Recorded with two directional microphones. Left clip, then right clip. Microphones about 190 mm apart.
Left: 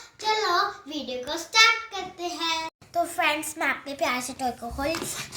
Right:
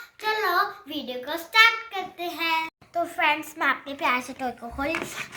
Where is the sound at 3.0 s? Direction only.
5° left (ahead or behind).